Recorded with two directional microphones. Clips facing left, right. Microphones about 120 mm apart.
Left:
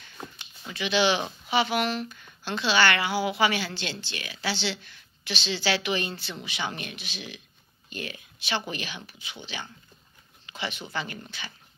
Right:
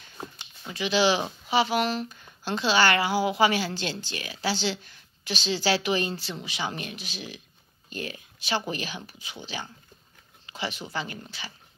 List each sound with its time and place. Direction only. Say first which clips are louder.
0.7 s a woman's voice: right 1 dB; 35° right (ahead or behind)